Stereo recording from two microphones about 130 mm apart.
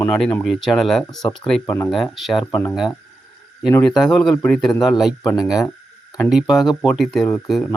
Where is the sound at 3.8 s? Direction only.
5° left (ahead or behind).